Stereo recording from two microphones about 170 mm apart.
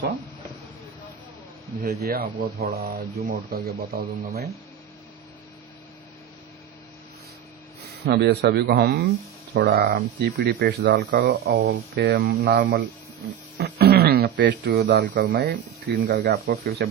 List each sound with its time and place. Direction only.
1.8 s speech: 70° right (ahead or behind)
8.0 s speech: 75° right (ahead or behind)